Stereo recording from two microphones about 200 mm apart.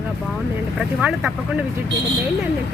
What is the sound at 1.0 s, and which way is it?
Speech, 5° right (ahead or behind).